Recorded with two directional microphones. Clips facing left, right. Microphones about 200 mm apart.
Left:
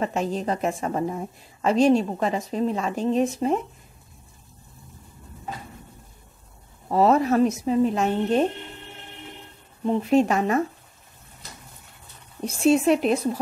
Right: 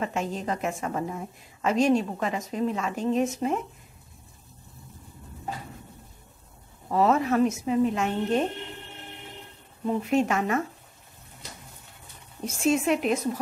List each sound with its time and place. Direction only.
0.0 s a woman's voice: 35° left (ahead or behind)
6.9 s a woman's voice: 35° left (ahead or behind)
9.8 s a woman's voice: 35° left (ahead or behind)
12.4 s a woman's voice: 35° left (ahead or behind)